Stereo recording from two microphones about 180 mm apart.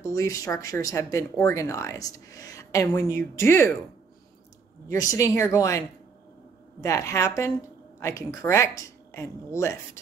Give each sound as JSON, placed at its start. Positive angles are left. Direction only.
{"t": 0.0, "sound": "speech", "side_deg": 20}
{"t": 4.8, "sound": "speech", "side_deg": 20}
{"t": 6.8, "sound": "speech", "side_deg": 15}